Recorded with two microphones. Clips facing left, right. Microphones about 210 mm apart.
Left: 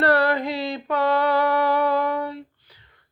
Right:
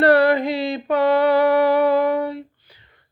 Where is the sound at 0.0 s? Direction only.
15° right (ahead or behind).